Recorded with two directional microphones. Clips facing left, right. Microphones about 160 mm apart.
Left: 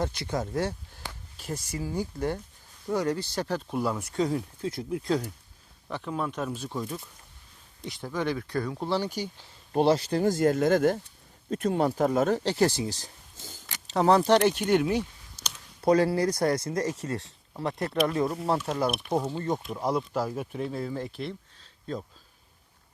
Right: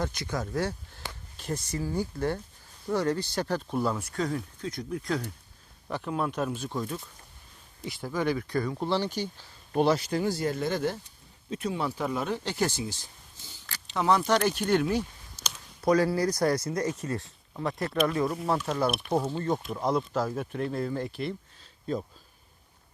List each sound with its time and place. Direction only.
0.0 s speech: 25° left (ahead or behind)
1.4 s speech: 5° left (ahead or behind)
4.0 s speech: 20° left (ahead or behind)
5.9 s speech: 5° right (ahead or behind)
6.7 s speech: 10° left (ahead or behind)
7.8 s speech: 5° right (ahead or behind); by 9.5 s 10° left (ahead or behind)
9.7 s speech: 35° left (ahead or behind); by 21.3 s centre (ahead or behind)